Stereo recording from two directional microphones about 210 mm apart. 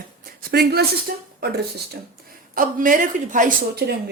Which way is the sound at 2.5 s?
40° right (ahead or behind).